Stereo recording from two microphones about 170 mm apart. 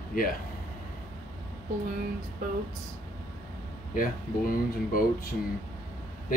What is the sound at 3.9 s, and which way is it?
Speech, 55° left (ahead or behind).